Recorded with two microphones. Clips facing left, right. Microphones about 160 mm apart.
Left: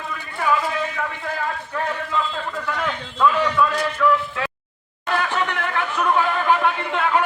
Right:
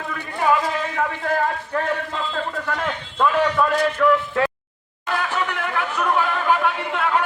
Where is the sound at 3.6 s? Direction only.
45° right (ahead or behind).